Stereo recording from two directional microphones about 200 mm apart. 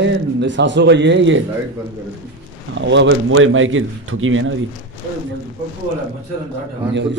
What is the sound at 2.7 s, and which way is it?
A man's voice, 65° right (ahead or behind).